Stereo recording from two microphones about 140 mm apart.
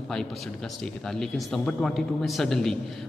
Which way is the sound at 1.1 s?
5° left (ahead or behind).